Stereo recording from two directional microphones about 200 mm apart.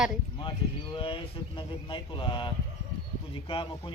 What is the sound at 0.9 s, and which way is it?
Speech, 25° left (ahead or behind).